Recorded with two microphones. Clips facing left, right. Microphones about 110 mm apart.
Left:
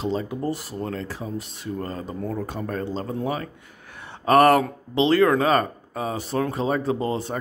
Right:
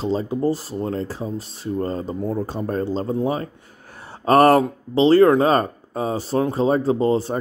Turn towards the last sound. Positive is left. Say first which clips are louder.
# right 6 dB
turn(degrees=-30)  # may be behind; listen again after turning